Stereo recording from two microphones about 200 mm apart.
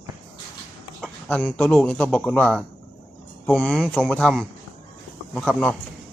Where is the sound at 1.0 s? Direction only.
Centre (ahead or behind).